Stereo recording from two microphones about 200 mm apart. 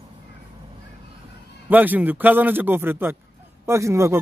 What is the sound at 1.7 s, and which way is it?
A man's voice, 10° right (ahead or behind).